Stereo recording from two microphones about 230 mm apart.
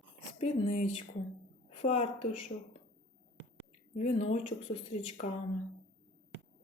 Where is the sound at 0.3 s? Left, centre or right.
Left.